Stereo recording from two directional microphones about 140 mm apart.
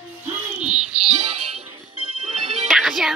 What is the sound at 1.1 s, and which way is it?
Music, 45° right (ahead or behind).